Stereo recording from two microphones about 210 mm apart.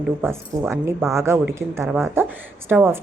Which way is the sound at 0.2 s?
10° right (ahead or behind).